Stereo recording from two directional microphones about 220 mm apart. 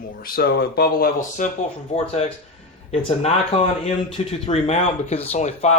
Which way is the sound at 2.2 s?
30° left (ahead or behind).